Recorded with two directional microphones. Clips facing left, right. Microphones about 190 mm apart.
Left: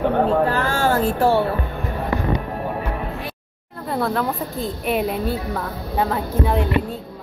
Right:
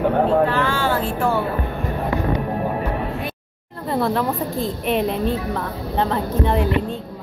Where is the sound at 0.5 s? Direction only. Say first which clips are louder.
Left 1 dB; 40° left (ahead or behind).